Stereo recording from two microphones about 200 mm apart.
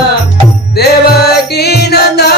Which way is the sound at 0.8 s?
55° left (ahead or behind).